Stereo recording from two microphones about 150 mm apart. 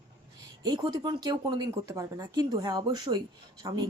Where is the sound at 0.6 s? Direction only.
25° right (ahead or behind).